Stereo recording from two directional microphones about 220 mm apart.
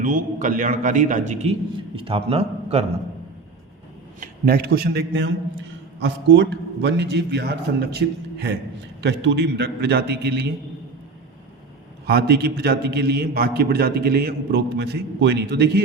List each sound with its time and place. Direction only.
0.0 s a man's voice: 40° right (ahead or behind)
4.2 s a man's voice: 45° right (ahead or behind)
12.0 s a man's voice: 45° right (ahead or behind)